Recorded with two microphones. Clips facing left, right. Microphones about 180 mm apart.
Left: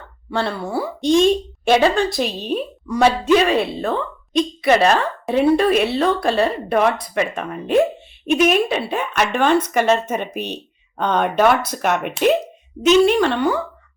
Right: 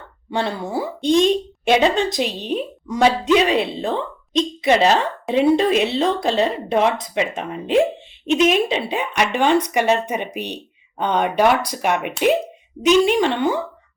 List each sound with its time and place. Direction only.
0.3 s a woman's voice: 20° right (ahead or behind)